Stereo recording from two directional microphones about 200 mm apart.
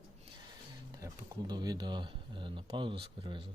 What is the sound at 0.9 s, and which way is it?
Speech, 20° right (ahead or behind).